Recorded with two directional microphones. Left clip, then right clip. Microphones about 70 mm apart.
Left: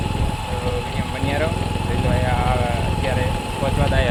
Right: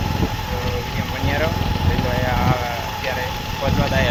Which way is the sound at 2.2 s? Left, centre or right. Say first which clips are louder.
Right 1 dB; centre.